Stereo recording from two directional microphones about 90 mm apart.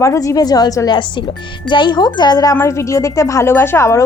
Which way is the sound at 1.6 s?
60° left (ahead or behind).